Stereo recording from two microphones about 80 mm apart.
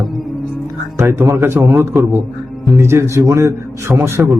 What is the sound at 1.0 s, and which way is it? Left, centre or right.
Speech, right.